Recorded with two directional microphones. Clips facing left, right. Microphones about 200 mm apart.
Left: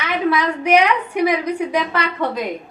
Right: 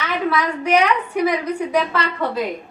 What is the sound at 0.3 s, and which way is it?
A woman's voice, 10° left (ahead or behind).